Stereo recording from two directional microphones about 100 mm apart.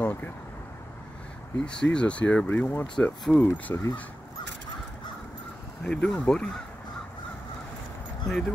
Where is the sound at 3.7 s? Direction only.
20° left (ahead or behind).